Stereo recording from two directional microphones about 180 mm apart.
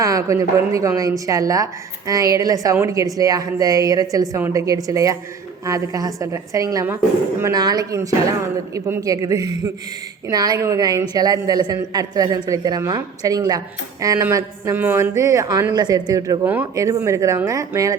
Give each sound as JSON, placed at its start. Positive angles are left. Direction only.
{"t": 0.0, "sound": "a woman's voice", "side_deg": -20}